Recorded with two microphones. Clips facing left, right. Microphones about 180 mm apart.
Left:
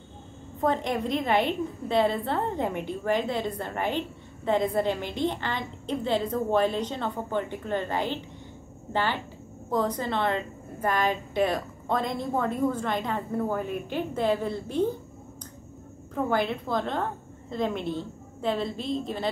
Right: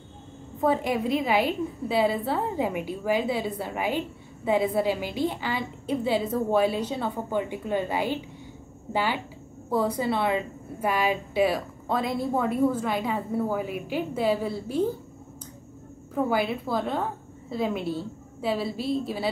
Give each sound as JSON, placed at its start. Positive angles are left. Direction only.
{"t": 0.6, "sound": "a woman's voice", "side_deg": -5}
{"t": 16.2, "sound": "a woman's voice", "side_deg": -5}